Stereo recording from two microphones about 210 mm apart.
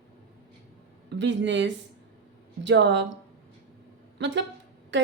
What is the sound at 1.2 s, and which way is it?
A woman's voice, 60° right (ahead or behind).